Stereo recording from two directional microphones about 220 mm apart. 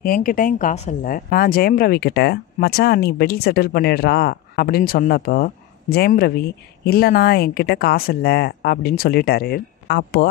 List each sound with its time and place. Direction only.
0.0 s speech: 40° left (ahead or behind)